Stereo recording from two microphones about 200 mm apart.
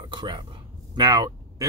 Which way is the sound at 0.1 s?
25° right (ahead or behind).